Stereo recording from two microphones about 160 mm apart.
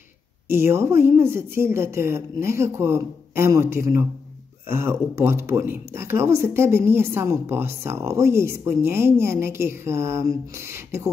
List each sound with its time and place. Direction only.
0.5 s speech: 15° right (ahead or behind)